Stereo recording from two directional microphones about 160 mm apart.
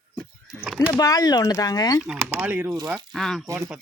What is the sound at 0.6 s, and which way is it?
Speech, 5° right (ahead or behind).